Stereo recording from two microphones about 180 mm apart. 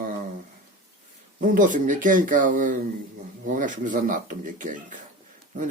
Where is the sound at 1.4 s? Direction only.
45° right (ahead or behind).